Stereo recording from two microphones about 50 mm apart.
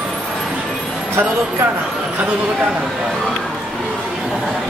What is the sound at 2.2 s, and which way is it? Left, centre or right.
Speech, right.